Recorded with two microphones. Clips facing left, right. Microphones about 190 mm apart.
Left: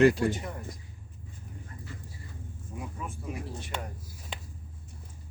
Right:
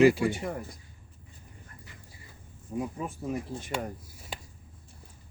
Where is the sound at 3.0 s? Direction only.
35° right (ahead or behind).